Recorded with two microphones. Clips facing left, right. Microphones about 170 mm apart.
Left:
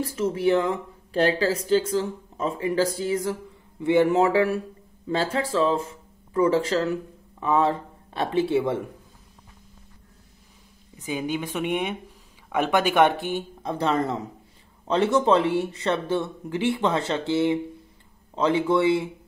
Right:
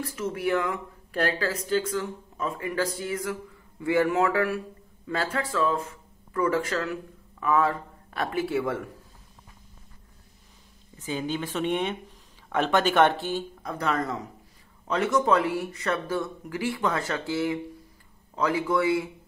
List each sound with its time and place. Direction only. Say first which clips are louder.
0.0 s speech: left 6 dB; 30° left (ahead or behind)
11.0 s speech: left 2 dB; 15° left (ahead or behind)